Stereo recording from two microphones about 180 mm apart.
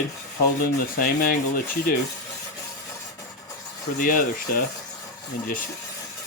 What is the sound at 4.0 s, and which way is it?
Speech, 50° left (ahead or behind).